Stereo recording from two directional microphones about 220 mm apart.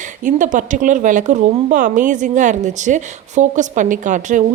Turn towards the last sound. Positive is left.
turn(degrees=-35)  # may be behind; listen again after turning